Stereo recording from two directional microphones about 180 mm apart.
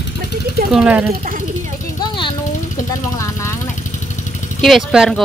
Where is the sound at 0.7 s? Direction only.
10° right (ahead or behind).